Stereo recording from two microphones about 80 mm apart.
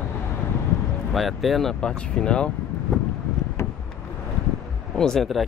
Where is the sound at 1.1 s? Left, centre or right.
Centre.